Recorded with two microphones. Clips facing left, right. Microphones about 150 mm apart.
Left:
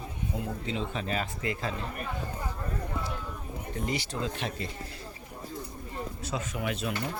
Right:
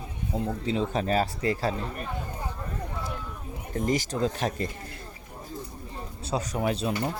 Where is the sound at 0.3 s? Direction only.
35° right (ahead or behind).